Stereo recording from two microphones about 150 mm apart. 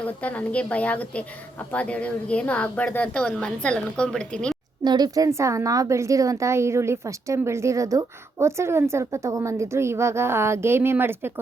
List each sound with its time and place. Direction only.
0.2 s a woman's voice: 10° left (ahead or behind)
4.8 s a woman's voice: 25° right (ahead or behind)